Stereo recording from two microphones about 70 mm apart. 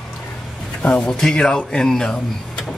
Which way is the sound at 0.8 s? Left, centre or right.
Centre.